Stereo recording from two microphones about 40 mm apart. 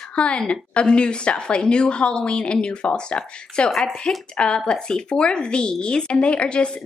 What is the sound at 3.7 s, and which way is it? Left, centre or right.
Chopping, centre.